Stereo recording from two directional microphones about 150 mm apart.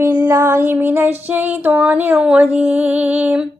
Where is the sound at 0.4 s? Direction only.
15° right (ahead or behind).